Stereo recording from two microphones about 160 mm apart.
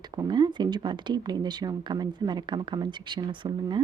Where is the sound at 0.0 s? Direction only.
25° right (ahead or behind).